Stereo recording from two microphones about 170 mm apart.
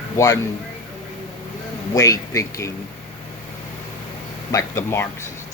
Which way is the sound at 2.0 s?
20° left (ahead or behind).